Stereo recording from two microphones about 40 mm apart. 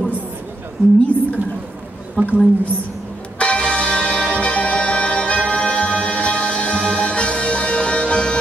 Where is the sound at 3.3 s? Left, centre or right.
Left.